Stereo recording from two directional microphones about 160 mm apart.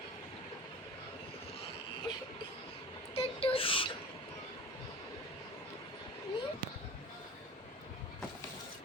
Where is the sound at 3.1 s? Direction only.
35° left (ahead or behind).